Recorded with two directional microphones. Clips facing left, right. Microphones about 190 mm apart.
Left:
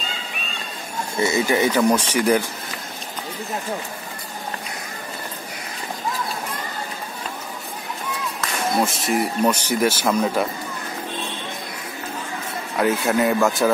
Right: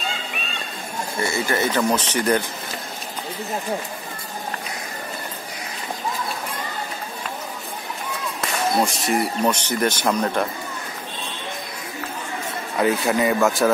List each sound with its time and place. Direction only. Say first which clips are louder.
1.2 s speech: left 4 dB; 15° left (ahead or behind)
8.8 s speech: even; centre (ahead or behind)
12.7 s speech: even; centre (ahead or behind)